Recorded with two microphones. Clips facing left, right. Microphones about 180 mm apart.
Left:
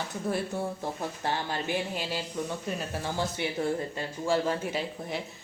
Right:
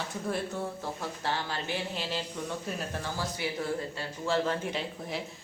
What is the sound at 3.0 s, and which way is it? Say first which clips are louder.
Speech: left 4 dB; 25° left (ahead or behind).